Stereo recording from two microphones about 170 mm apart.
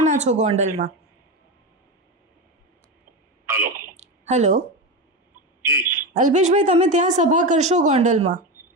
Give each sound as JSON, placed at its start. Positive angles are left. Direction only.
{"t": 0.0, "sound": "speech", "side_deg": -45}
{"t": 3.6, "sound": "a sound", "side_deg": -55}
{"t": 5.6, "sound": "speech", "side_deg": -15}
{"t": 6.1, "sound": "speech", "side_deg": -45}